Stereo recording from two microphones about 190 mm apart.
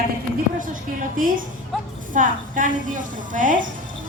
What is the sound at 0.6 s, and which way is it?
A woman's voice, 45° right (ahead or behind).